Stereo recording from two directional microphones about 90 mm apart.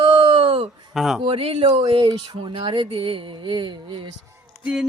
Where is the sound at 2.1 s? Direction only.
50° right (ahead or behind).